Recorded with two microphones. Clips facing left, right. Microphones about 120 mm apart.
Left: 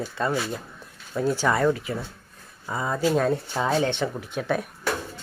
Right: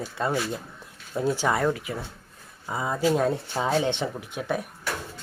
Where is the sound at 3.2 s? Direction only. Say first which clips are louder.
Left 2 dB; 15° right (ahead or behind).